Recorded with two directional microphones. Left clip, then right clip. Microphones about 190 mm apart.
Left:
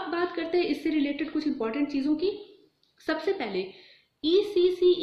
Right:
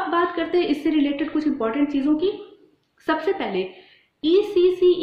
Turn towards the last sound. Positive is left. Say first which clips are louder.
# right 5 dB
turn(degrees=5)  # may be behind; listen again after turning